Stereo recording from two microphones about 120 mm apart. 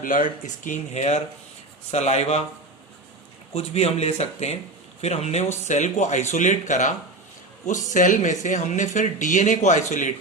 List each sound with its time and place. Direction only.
0.1 s speech: 90° left
1.9 s speech: 65° left (ahead or behind)
3.5 s speech: 60° left (ahead or behind)
5.6 s speech: 80° left